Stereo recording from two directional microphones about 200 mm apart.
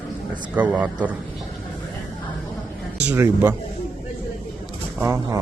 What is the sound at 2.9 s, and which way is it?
Speech, 5° right (ahead or behind).